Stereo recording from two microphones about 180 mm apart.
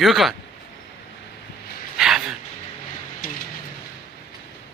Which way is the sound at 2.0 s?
Centre (ahead or behind).